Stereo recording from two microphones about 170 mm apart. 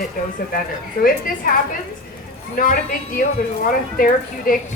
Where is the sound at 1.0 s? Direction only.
55° left (ahead or behind).